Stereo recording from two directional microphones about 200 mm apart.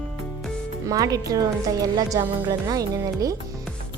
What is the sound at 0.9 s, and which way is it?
Speech, 15° right (ahead or behind).